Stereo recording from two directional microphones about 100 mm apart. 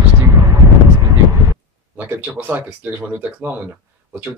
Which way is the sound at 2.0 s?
20° right (ahead or behind).